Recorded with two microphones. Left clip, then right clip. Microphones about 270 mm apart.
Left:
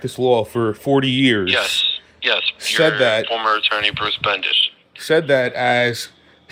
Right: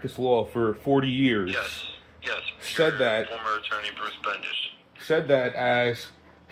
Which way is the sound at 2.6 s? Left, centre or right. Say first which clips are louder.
Left 5 dB; left.